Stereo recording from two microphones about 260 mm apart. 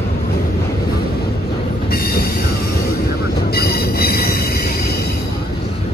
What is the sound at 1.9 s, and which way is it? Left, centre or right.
Train, left.